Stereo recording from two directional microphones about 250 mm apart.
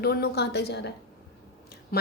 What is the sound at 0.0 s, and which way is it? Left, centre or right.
A woman's voice, left.